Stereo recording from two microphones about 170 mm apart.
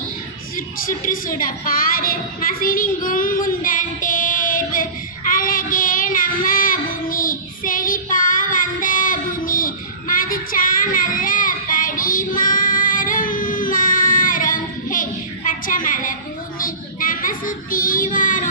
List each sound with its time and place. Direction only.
0.5 s a child's voice: 55° left (ahead or behind)
5.3 s child singing: 55° left (ahead or behind)
15.4 s a woman's voice: 50° left (ahead or behind)
16.6 s child singing: 55° left (ahead or behind)